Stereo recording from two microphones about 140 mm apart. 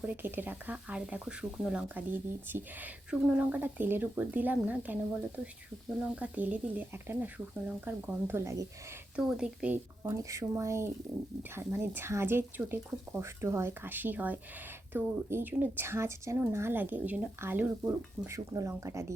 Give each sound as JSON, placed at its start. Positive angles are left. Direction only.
{"t": 0.0, "sound": "speech", "side_deg": -15}
{"t": 9.1, "sound": "speech", "side_deg": -5}
{"t": 10.0, "sound": "speech", "side_deg": -20}